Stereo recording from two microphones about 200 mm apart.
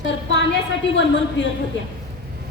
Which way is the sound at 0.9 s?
65° left (ahead or behind).